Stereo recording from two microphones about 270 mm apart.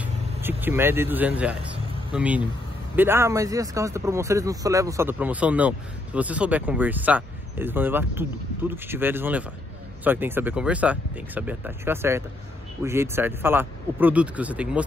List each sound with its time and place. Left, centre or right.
0.0 s speech: centre